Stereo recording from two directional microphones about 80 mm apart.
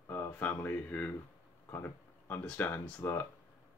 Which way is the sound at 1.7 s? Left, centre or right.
Left.